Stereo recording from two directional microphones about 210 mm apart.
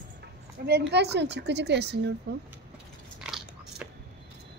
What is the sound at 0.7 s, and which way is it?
A woman's voice, 50° right (ahead or behind).